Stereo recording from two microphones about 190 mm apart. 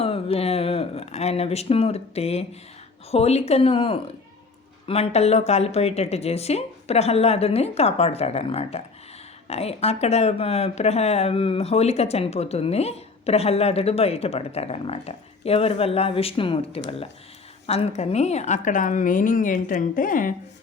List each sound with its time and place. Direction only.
0.0 s a woman's voice: 30° left (ahead or behind)